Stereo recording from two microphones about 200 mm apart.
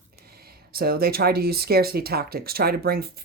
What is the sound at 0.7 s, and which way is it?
Speech, 50° right (ahead or behind).